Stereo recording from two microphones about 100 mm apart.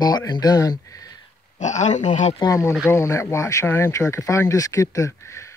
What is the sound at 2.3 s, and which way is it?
Speech, 35° left (ahead or behind).